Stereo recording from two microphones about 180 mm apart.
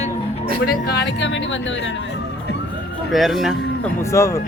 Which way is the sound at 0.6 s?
70° left (ahead or behind).